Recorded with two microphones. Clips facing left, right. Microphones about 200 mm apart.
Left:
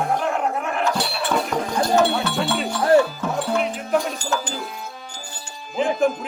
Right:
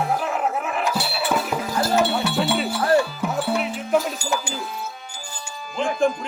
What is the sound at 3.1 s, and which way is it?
Music, 5° right (ahead or behind).